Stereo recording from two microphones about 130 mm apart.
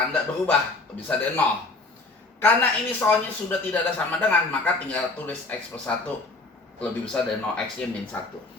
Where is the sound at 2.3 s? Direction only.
15° left (ahead or behind).